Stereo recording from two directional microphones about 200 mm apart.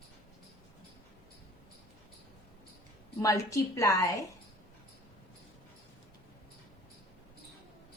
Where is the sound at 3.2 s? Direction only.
15° left (ahead or behind).